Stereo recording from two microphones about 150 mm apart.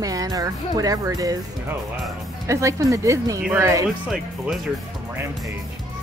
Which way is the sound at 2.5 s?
20° right (ahead or behind).